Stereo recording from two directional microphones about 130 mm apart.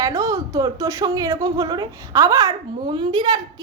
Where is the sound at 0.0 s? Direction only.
25° right (ahead or behind).